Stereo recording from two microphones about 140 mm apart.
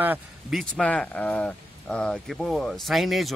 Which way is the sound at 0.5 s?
5° left (ahead or behind).